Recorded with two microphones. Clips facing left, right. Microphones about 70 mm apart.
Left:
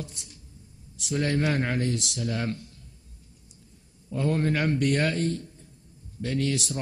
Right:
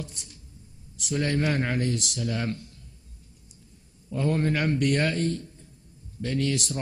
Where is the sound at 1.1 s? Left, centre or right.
Left.